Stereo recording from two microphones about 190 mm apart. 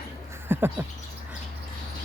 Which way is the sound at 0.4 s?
10° right (ahead or behind).